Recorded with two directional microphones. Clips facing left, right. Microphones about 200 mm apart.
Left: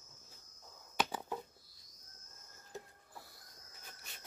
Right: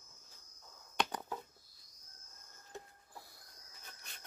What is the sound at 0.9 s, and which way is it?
Finger snapping, 5° left (ahead or behind).